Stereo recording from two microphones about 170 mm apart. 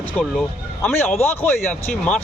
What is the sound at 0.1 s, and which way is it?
Speech, 5° left (ahead or behind).